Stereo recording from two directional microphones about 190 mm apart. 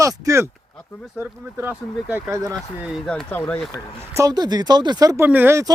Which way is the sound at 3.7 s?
15° right (ahead or behind).